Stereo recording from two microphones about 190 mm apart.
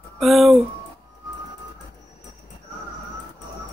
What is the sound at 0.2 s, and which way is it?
Speech, centre (ahead or behind).